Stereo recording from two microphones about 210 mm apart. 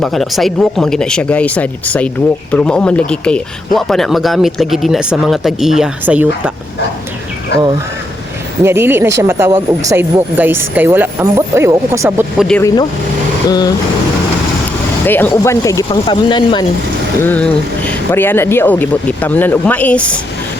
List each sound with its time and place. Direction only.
0.0 s speech: centre (ahead or behind)
7.5 s speech: 55° left (ahead or behind)
8.6 s speech: 10° right (ahead or behind)
13.5 s speech: 20° left (ahead or behind)
15.0 s speech: 10° left (ahead or behind)
17.2 s speech: 10° left (ahead or behind)